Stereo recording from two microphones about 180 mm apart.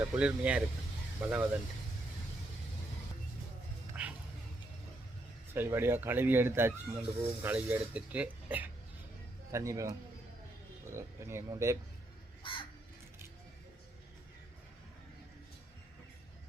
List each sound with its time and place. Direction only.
0.0 s speech: 10° right (ahead or behind)
3.9 s a sound: 10° right (ahead or behind)
5.5 s speech: 10° right (ahead or behind)
10.9 s speech: 15° right (ahead or behind)
12.4 s crow: 30° left (ahead or behind)